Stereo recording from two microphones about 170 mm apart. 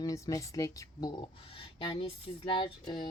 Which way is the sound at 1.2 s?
30° left (ahead or behind).